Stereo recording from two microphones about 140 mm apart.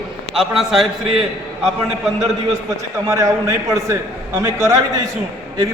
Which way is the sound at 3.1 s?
20° right (ahead or behind).